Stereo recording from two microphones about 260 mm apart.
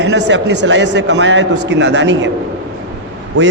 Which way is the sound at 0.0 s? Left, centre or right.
Right.